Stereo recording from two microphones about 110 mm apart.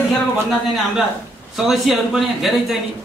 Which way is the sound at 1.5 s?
Centre (ahead or behind).